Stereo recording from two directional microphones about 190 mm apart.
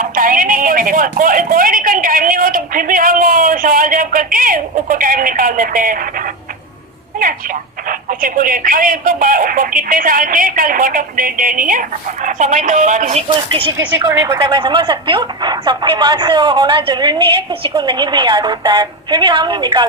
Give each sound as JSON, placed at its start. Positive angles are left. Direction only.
{"t": 0.0, "sound": "speech", "side_deg": -45}
{"t": 7.9, "sound": "speech", "side_deg": -45}
{"t": 13.5, "sound": "speech", "side_deg": -25}